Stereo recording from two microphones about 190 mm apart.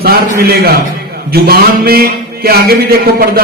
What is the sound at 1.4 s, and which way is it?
A man's voice, 55° right (ahead or behind).